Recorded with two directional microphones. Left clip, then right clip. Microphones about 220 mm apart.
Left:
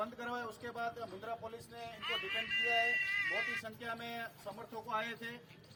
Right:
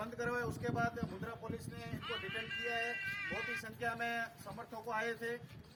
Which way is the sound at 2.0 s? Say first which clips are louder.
Left 4 dB; 50° left (ahead or behind).